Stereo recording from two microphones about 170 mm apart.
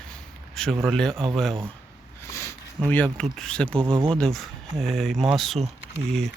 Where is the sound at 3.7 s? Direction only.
30° right (ahead or behind).